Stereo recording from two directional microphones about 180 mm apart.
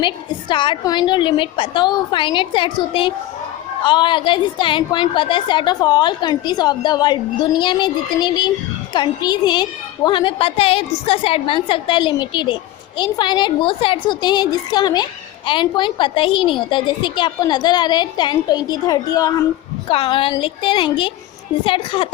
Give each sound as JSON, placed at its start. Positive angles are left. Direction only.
{"t": 0.0, "sound": "a woman's voice", "side_deg": 25}